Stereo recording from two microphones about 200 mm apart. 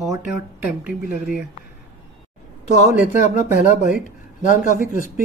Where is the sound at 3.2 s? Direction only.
35° left (ahead or behind).